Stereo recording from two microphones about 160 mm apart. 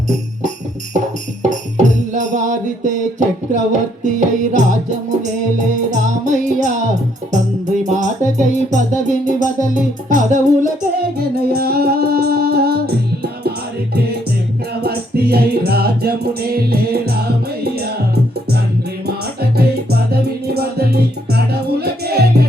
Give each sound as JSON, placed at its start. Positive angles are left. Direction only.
{"t": 1.4, "sound": "music", "side_deg": -50}
{"t": 7.9, "sound": "music", "side_deg": -50}
{"t": 11.2, "sound": "music", "side_deg": -75}
{"t": 14.7, "sound": "music", "side_deg": -80}
{"t": 19.0, "sound": "music", "side_deg": -80}